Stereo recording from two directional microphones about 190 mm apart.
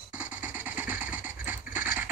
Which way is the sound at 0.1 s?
5° right (ahead or behind).